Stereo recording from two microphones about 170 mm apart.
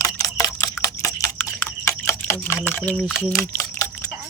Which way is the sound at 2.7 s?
10° left (ahead or behind).